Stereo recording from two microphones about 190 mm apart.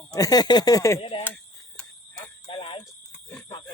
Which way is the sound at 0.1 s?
20° left (ahead or behind).